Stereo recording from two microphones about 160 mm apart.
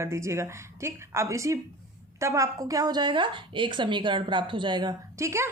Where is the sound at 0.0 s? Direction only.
15° right (ahead or behind).